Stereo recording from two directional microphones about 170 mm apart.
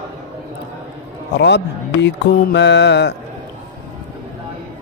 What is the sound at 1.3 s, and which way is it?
A man's voice, 90° left.